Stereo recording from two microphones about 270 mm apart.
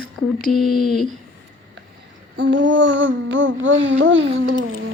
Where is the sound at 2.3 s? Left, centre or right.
Right.